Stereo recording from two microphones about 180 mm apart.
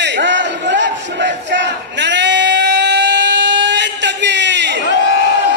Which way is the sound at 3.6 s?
80° right.